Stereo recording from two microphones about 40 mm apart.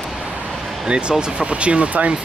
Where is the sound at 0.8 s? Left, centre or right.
Right.